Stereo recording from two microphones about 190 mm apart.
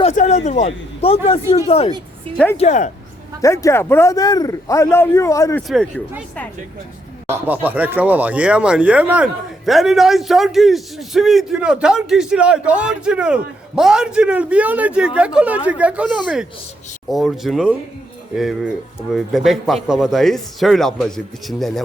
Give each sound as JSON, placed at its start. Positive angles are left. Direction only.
{"t": 0.0, "sound": "a man's voice", "side_deg": 40}
{"t": 3.4, "sound": "a man's voice", "side_deg": 15}
{"t": 5.6, "sound": "speech", "side_deg": 0}
{"t": 7.3, "sound": "speech", "side_deg": -10}